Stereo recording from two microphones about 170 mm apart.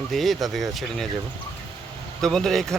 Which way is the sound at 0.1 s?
Centre (ahead or behind).